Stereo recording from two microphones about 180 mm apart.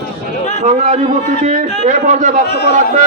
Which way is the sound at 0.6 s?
40° right (ahead or behind).